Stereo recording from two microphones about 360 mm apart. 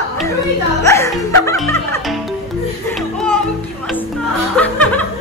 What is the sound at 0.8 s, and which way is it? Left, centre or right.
Speech, centre.